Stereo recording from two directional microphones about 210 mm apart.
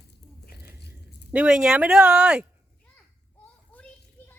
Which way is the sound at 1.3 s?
5° right (ahead or behind).